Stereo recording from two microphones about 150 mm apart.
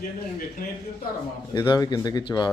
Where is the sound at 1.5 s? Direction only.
30° left (ahead or behind).